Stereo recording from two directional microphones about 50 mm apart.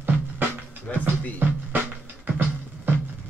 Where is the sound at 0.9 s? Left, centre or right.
Left.